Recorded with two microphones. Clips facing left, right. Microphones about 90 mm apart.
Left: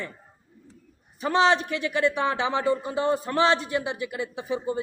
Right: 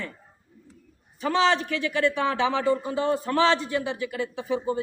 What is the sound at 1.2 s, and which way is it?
A man's voice, 20° left (ahead or behind).